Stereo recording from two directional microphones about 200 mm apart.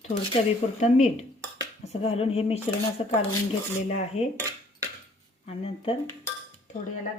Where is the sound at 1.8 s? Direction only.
30° left (ahead or behind).